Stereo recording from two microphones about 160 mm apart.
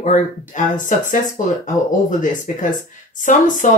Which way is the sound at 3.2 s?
50° left (ahead or behind).